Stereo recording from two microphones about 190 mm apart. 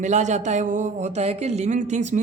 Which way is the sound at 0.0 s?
40° right (ahead or behind).